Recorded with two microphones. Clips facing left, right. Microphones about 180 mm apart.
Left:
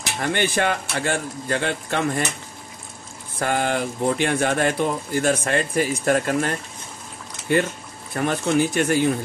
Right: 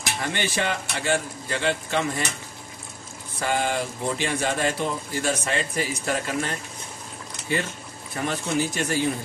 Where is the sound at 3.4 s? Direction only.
55° left (ahead or behind).